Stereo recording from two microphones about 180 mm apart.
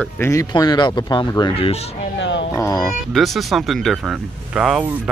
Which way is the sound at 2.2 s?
80° left.